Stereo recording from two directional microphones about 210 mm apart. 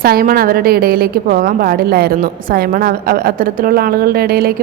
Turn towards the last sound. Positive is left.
turn(degrees=-45)  # may be behind; listen again after turning